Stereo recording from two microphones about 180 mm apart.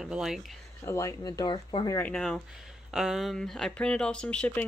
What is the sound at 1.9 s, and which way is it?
Speech, 10° left (ahead or behind).